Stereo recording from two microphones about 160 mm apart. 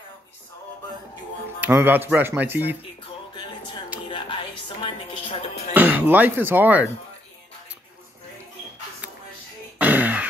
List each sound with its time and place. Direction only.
1.6 s speech: 15° right (ahead or behind)
4.1 s music: 30° left (ahead or behind)
5.8 s speech: 10° right (ahead or behind)
9.8 s throat clearing: 10° right (ahead or behind)